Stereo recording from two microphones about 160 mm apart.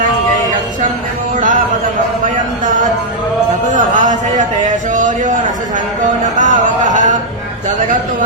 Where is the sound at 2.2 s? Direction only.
55° right (ahead or behind).